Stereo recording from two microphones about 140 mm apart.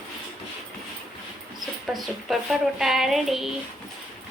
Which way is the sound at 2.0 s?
Centre (ahead or behind).